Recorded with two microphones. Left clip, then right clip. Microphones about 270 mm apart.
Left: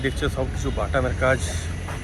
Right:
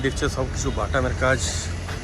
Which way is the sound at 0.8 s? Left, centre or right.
Centre.